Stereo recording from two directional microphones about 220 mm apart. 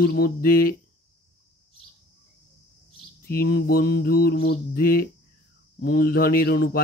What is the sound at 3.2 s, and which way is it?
Speech, 45° left (ahead or behind).